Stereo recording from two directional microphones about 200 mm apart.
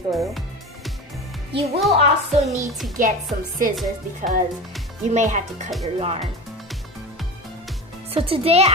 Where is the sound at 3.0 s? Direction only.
45° right (ahead or behind).